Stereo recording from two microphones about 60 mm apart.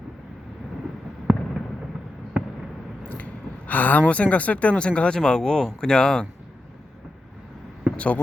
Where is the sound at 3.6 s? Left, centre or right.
Left.